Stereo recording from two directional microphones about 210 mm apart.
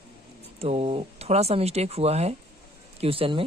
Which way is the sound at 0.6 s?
30° right (ahead or behind).